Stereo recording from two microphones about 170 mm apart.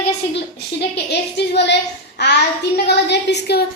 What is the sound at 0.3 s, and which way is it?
A woman's voice, 75° left (ahead or behind).